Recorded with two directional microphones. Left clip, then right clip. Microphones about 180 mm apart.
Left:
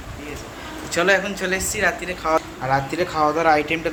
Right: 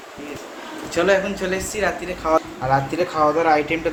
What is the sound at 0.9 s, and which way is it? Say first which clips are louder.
Speech: even; centre (ahead or behind).